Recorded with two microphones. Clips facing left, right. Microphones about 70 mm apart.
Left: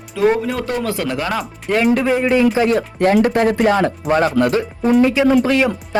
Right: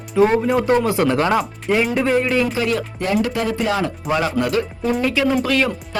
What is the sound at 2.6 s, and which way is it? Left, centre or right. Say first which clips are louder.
Speech: left 5 dB; left.